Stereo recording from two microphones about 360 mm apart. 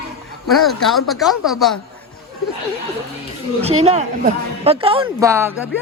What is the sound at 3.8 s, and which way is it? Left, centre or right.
A man's voice, centre.